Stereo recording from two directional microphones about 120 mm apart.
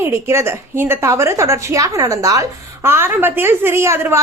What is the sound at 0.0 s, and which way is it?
A woman's voice, 20° right (ahead or behind).